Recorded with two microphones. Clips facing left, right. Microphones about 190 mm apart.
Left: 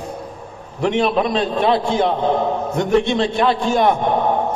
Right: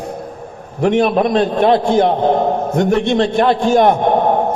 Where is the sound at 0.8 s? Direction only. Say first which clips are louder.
Right 4 dB; 50° right (ahead or behind).